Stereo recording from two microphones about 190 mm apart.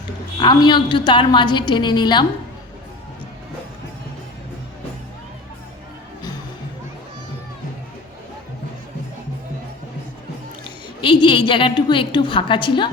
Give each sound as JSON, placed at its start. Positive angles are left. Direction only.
{"t": 0.3, "sound": "a woman's voice", "side_deg": 25}
{"t": 11.0, "sound": "a woman's voice", "side_deg": 25}